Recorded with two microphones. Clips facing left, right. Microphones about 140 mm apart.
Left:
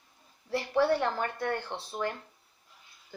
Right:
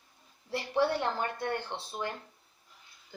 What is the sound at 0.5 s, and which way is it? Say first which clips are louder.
Speech: left 3 dB; 20° right (ahead or behind).